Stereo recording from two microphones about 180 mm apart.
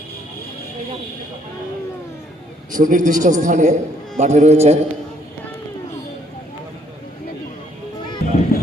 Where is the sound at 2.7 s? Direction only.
45° right (ahead or behind).